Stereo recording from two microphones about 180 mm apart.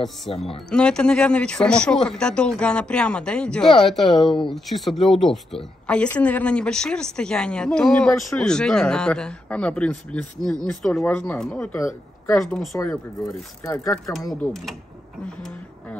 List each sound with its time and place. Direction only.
0.3 s speech: 30° left (ahead or behind)
0.7 s speech: 5° left (ahead or behind)
12.4 s speech: centre (ahead or behind)
12.9 s speech: 20° left (ahead or behind)
14.4 s speech: centre (ahead or behind)